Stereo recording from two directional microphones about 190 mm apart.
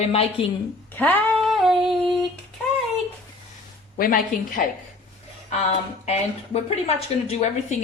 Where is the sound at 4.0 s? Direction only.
45° left (ahead or behind).